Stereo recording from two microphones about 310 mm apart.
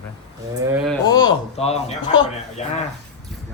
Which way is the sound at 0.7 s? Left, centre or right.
Centre.